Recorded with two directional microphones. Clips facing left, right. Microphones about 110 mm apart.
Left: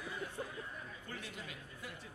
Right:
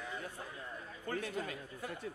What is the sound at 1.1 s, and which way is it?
Speech, 45° right (ahead or behind).